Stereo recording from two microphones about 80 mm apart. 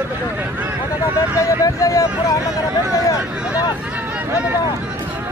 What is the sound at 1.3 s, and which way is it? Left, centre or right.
Vehicle, left.